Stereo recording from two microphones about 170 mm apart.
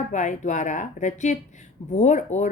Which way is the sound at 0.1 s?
45° left (ahead or behind).